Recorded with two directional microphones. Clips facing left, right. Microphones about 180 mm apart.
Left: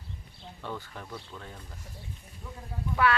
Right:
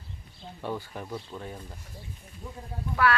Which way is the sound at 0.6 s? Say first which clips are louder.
Right 5 dB; 15° right (ahead or behind).